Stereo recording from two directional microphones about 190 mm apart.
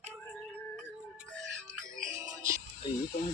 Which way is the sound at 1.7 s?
15° right (ahead or behind).